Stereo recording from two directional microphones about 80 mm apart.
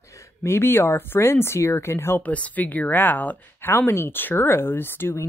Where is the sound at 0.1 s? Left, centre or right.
Left.